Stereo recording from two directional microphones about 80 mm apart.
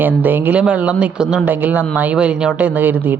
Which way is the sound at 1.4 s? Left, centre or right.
Right.